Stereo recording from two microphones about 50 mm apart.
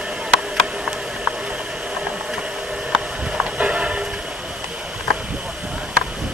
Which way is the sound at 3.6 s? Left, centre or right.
Right.